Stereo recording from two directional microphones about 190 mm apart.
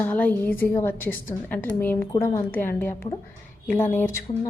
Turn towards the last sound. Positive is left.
turn(degrees=10)  # may be behind; listen again after turning